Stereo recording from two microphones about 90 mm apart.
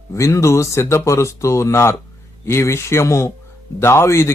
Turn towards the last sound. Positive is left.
turn(degrees=30)  # may be behind; listen again after turning